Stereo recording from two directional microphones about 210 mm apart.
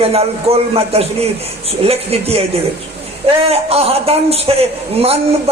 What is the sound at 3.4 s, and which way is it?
A man's voice, 30° right (ahead or behind).